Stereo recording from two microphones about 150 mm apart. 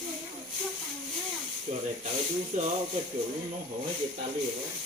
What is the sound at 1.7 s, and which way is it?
Speech, 50° right (ahead or behind).